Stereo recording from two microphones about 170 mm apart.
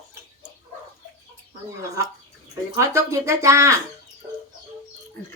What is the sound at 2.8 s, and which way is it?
Speech, 15° right (ahead or behind).